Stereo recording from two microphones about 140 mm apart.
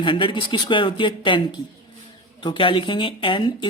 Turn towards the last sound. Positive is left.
turn(degrees=35)  # may be behind; listen again after turning